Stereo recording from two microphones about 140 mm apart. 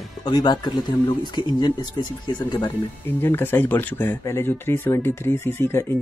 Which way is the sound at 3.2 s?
15° left (ahead or behind).